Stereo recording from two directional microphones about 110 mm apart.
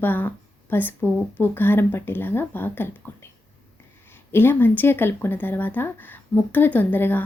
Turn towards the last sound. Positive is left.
turn(degrees=20)  # may be behind; listen again after turning